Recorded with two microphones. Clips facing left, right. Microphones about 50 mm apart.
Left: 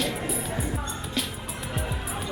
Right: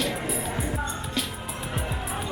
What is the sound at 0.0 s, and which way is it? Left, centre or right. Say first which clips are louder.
Music: right 1 dB; centre.